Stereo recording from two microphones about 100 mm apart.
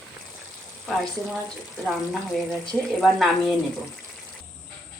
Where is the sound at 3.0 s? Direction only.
Centre (ahead or behind).